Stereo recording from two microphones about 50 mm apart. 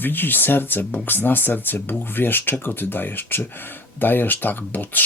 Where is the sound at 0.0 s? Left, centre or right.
Left.